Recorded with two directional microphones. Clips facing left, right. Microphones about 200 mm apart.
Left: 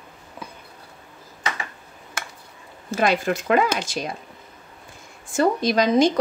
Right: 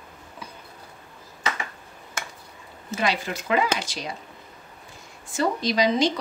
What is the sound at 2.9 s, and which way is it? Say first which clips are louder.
Speech: left 5 dB; 50° left (ahead or behind).